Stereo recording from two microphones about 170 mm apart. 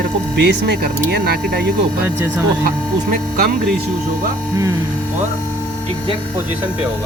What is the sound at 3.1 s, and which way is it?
Speech, 60° right (ahead or behind).